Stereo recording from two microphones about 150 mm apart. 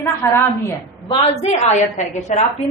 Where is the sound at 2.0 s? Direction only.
50° left (ahead or behind).